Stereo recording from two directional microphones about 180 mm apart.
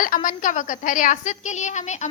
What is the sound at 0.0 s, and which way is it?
A woman's voice, 50° left (ahead or behind).